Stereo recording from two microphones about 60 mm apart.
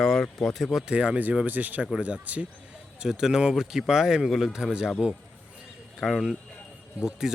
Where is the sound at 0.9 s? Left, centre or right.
Centre.